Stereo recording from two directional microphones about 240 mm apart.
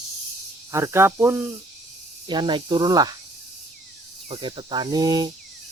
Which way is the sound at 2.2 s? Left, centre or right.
Centre.